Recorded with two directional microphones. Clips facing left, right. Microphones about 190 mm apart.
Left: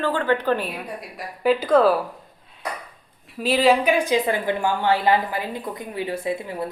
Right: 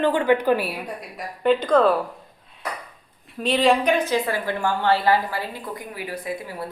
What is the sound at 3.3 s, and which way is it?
A woman's voice, 5° left (ahead or behind).